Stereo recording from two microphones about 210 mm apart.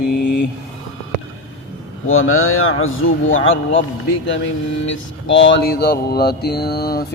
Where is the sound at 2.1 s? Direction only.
75° left (ahead or behind).